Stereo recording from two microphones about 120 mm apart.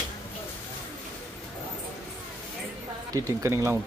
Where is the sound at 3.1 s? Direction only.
25° right (ahead or behind).